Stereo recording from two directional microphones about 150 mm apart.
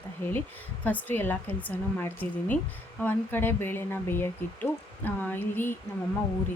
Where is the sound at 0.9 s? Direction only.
10° left (ahead or behind).